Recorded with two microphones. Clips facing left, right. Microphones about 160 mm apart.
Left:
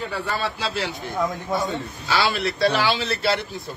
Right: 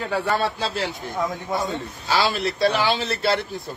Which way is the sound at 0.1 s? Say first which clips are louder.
Right 4 dB; 45° right (ahead or behind).